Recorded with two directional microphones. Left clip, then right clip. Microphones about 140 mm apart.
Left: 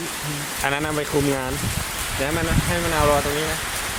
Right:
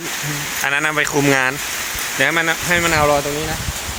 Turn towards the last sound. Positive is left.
turn(degrees=-35)  # may be behind; listen again after turning